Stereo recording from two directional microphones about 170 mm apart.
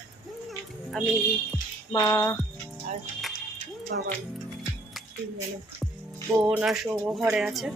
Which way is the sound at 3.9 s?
75° right (ahead or behind).